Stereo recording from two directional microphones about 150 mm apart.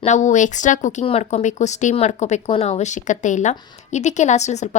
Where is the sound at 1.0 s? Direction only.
45° left (ahead or behind).